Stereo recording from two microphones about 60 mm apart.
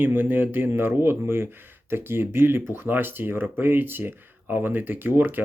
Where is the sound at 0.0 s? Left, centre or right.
Right.